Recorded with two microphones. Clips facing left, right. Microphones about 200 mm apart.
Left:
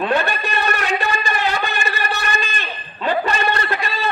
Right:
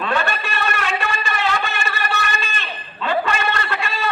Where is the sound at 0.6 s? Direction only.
40° left (ahead or behind).